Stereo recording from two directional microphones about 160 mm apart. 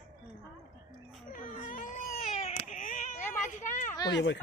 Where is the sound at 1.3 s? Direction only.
55° left (ahead or behind).